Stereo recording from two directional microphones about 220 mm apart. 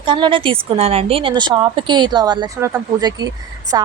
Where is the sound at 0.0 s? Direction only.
20° right (ahead or behind).